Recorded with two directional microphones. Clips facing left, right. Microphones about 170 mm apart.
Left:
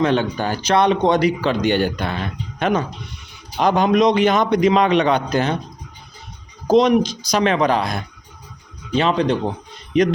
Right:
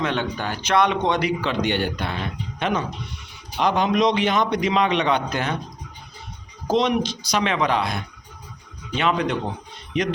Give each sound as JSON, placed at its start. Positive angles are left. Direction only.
{"t": 0.0, "sound": "a man's voice", "side_deg": 35}
{"t": 6.7, "sound": "a man's voice", "side_deg": 40}
{"t": 9.0, "sound": "a man's voice", "side_deg": 30}